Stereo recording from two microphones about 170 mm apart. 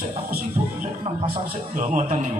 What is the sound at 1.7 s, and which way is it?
Speech, 50° right (ahead or behind).